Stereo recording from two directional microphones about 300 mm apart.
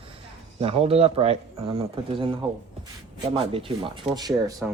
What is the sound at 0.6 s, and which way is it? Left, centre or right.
Speech, centre.